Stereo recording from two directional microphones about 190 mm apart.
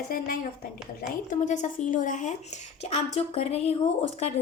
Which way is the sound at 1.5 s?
40° left (ahead or behind).